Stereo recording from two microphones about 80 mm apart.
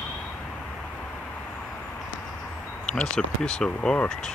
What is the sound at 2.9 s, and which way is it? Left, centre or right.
Speech, centre.